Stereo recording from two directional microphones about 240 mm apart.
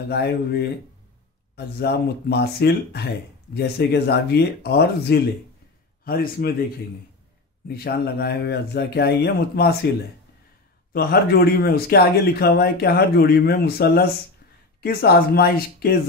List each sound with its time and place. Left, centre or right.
0.1 s speech: left
7.6 s speech: left